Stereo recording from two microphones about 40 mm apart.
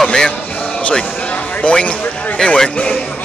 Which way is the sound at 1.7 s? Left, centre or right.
Left.